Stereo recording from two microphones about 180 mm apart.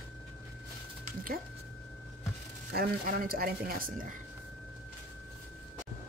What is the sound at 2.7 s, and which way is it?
Speech, 55° right (ahead or behind).